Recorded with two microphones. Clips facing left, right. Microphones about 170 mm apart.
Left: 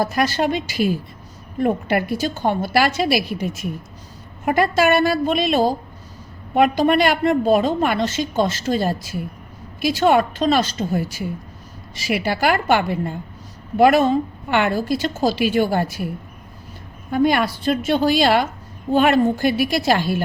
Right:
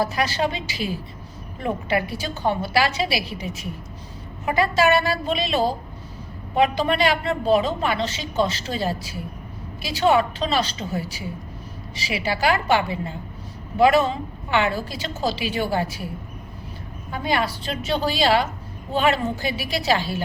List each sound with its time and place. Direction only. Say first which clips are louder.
0.0 s a woman's voice: left 3 dB; 45° left (ahead or behind)
17.1 s a woman's voice: left 6 dB; 50° left (ahead or behind)